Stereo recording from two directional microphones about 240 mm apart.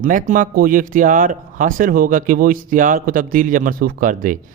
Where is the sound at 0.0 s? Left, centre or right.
Right.